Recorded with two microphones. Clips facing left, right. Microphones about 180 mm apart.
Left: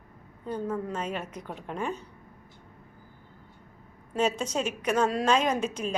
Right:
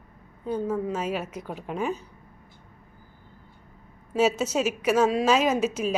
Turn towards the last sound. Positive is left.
turn(degrees=-5)  # may be behind; listen again after turning